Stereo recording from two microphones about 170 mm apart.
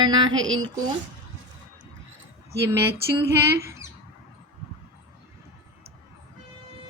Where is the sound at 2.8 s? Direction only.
15° right (ahead or behind).